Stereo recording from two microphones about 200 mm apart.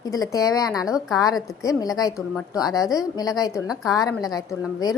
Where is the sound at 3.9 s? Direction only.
20° left (ahead or behind).